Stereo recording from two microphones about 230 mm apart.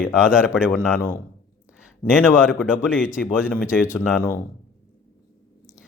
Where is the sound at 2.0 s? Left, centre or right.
Centre.